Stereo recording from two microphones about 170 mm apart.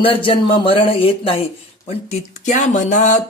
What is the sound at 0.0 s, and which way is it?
Speech, 30° left (ahead or behind).